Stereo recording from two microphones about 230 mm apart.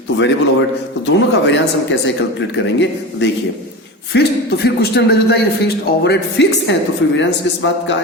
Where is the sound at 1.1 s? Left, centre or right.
Left.